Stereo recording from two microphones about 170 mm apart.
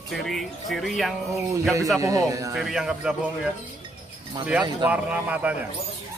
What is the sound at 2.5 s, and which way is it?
Speech, centre (ahead or behind).